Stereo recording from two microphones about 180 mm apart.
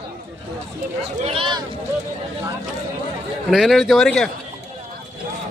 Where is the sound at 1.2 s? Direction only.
30° right (ahead or behind).